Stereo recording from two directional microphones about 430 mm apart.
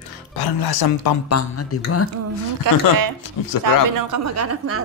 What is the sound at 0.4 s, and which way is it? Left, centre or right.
Speech, left.